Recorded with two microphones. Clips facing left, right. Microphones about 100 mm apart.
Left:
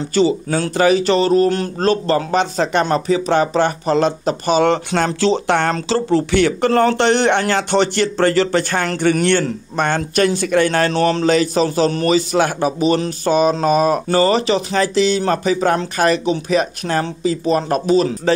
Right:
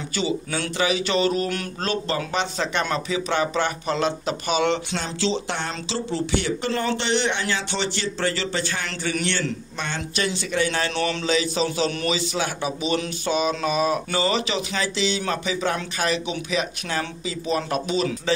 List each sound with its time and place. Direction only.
0.1 s speech: 45° left (ahead or behind)
10.9 s speech: 40° left (ahead or behind)